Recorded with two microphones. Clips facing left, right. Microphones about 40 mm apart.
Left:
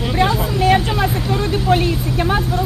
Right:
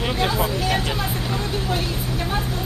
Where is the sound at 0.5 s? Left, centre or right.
Left.